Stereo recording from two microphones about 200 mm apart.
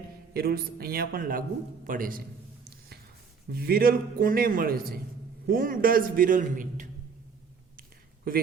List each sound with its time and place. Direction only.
0.3 s a man's voice: 50° right (ahead or behind)
3.5 s a man's voice: 50° right (ahead or behind)
7.8 s a sound: 45° right (ahead or behind)